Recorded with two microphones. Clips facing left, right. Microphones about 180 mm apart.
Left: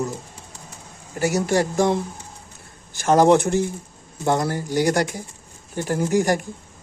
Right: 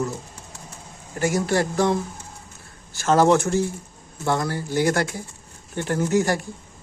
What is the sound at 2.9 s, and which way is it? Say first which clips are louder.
Speech: left 2 dB; 15° left (ahead or behind).